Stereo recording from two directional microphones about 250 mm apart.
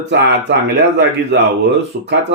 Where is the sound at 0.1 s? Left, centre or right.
Right.